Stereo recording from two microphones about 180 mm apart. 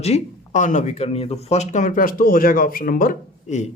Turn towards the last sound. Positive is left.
turn(degrees=45)  # may be behind; listen again after turning